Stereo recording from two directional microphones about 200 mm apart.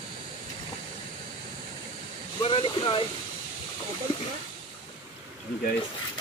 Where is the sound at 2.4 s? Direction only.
25° left (ahead or behind).